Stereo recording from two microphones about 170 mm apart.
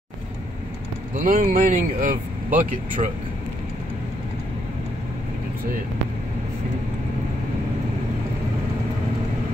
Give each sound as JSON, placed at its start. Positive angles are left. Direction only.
{"t": 1.1, "sound": "speech", "side_deg": -55}